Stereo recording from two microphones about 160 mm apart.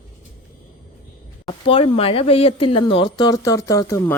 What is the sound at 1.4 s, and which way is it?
Speech, 35° left (ahead or behind).